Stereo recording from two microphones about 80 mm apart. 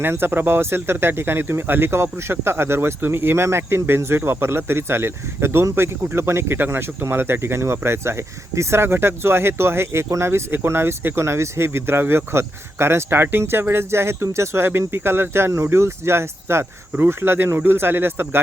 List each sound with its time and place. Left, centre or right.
0.0 s speech: right